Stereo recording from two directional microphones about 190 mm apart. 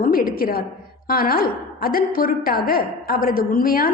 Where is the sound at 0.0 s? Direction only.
50° left (ahead or behind).